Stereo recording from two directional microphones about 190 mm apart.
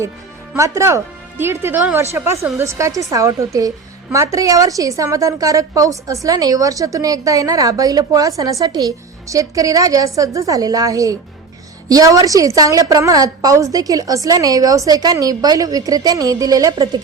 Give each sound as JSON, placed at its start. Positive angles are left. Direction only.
{"t": 0.5, "sound": "a woman's voice", "side_deg": -15}